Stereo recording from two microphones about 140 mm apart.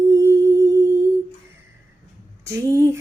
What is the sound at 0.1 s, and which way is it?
Humming, 25° right (ahead or behind).